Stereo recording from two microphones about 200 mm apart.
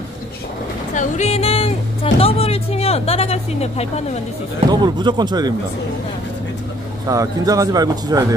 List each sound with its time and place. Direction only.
0.9 s music: 35° left (ahead or behind)
2.1 s speech: 30° left (ahead or behind)
4.6 s speech: 20° right (ahead or behind)
7.1 s a man's voice: 15° right (ahead or behind)